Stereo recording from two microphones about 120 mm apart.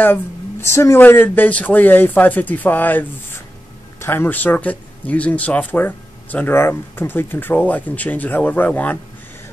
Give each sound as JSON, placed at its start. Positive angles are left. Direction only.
{"t": 0.0, "sound": "speech", "side_deg": 20}